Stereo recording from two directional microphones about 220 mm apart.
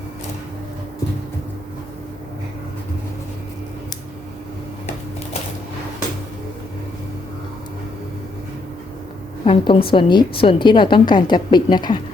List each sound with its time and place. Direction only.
9.4 s a woman's voice: 25° left (ahead or behind)